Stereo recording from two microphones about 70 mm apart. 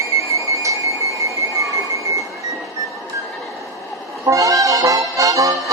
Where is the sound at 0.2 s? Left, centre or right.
Right.